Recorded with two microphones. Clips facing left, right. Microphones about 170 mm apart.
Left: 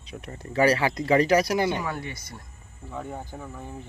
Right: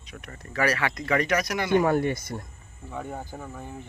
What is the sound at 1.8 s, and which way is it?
Speech, 50° right (ahead or behind).